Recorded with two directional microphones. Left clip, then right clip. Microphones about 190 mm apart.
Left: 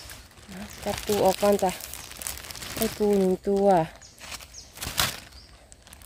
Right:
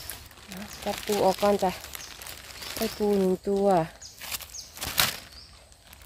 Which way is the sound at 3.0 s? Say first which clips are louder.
Left 2 dB; 15° left (ahead or behind).